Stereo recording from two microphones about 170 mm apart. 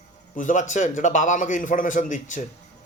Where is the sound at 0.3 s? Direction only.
45° left (ahead or behind).